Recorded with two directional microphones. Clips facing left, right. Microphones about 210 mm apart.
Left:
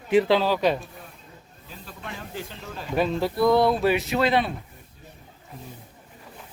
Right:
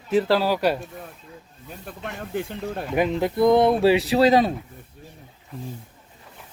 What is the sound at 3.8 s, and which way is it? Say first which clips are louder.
Speech: right 5 dB; 30° right (ahead or behind).